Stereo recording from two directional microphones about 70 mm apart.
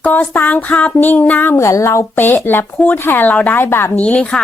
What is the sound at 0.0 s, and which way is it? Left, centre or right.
Speech, left.